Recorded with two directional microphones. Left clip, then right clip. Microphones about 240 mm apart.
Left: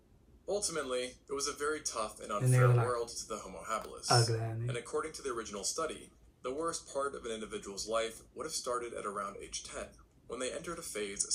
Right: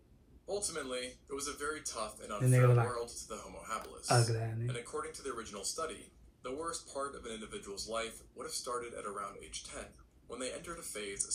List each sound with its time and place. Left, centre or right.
0.4 s speech: left
2.4 s speech: centre
2.9 s speech: left
3.8 s speech: centre
4.6 s speech: left